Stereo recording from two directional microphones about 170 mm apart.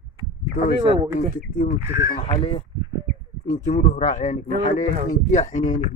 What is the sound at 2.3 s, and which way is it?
Speech, 35° left (ahead or behind).